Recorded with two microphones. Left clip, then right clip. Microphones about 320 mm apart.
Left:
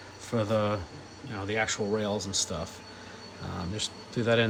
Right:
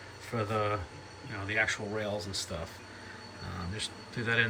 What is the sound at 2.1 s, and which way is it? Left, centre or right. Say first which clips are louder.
Speech: left 4 dB; left.